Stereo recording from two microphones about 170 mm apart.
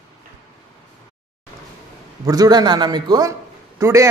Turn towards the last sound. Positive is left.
turn(degrees=-15)  # may be behind; listen again after turning